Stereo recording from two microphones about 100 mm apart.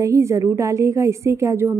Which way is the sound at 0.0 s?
30° right (ahead or behind).